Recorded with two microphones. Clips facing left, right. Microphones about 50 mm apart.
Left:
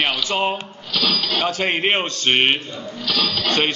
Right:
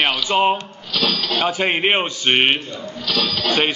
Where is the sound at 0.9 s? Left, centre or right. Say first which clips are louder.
Right 1 dB; centre.